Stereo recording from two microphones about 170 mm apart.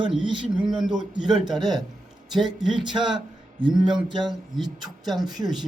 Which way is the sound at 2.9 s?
30° right (ahead or behind).